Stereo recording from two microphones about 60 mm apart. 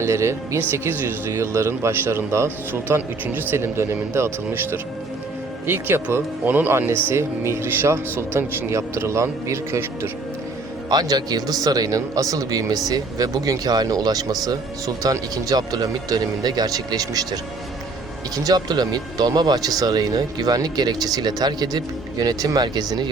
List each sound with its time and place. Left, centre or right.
0.0 s speech: right
11.1 s a man's voice: right
18.3 s a man's voice: right